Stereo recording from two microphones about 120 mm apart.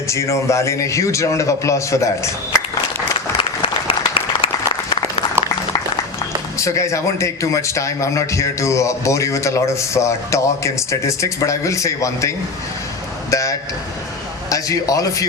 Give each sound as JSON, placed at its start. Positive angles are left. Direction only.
{"t": 0.1, "sound": "a man's voice", "side_deg": 25}
{"t": 3.3, "sound": "applause", "side_deg": 50}
{"t": 6.6, "sound": "a man's voice", "side_deg": 25}
{"t": 13.3, "sound": "a sound", "side_deg": 25}
{"t": 14.5, "sound": "a man's voice", "side_deg": 30}